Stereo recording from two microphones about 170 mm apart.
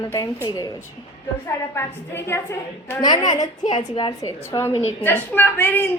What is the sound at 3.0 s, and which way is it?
Speech, 25° left (ahead or behind).